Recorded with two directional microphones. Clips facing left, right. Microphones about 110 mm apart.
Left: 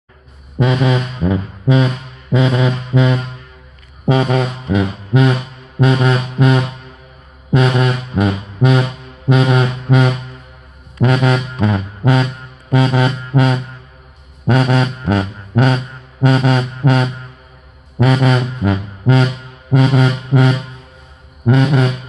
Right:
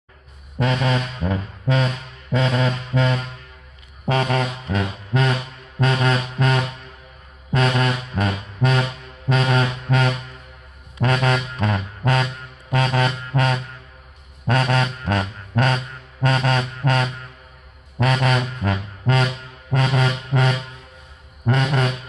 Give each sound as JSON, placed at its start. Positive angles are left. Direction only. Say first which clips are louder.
{"t": 0.6, "sound": "music", "louder": "left 6 dB", "side_deg": 15}
{"t": 17.9, "sound": "brass instrument", "louder": "left 6 dB", "side_deg": 15}
{"t": 21.5, "sound": "music", "louder": "left 7 dB", "side_deg": 10}